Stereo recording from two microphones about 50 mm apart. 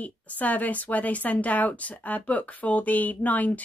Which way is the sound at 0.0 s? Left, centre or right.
Left.